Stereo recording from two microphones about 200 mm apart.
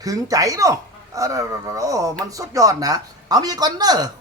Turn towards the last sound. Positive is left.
turn(degrees=-20)  # may be behind; listen again after turning